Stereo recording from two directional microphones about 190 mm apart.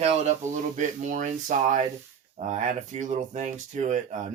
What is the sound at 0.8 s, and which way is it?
Speech, 40° right (ahead or behind).